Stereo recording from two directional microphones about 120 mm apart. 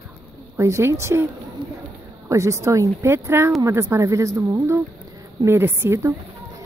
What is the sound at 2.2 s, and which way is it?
Speech, 25° right (ahead or behind).